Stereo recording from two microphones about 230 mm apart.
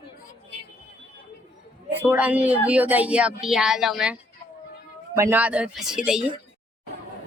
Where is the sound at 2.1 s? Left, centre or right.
Centre.